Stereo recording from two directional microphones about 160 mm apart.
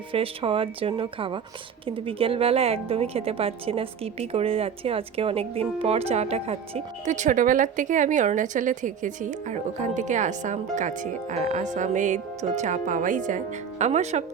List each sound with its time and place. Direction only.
0.1 s a woman's voice: 35° right (ahead or behind)